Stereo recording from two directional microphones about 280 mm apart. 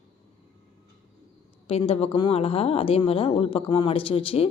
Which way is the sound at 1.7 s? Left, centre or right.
Left.